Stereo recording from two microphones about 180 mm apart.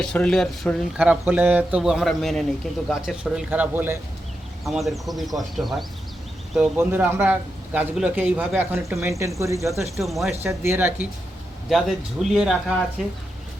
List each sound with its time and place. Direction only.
0.0 s speech: 5° left (ahead or behind)
6.7 s a man's voice: 10° right (ahead or behind)
10.0 s speech: centre (ahead or behind)
10.6 s a man's voice: 10° right (ahead or behind)